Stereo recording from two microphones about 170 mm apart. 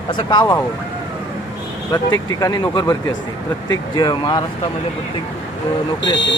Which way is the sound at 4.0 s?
25° left (ahead or behind).